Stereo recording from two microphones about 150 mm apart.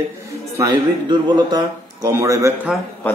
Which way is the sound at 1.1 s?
25° right (ahead or behind).